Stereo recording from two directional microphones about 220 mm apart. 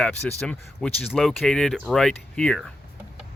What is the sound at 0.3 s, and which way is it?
Speech, 5° left (ahead or behind).